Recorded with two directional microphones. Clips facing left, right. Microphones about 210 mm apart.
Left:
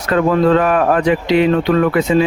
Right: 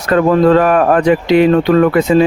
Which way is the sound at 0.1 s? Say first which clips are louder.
Right 3 dB; 45° right (ahead or behind).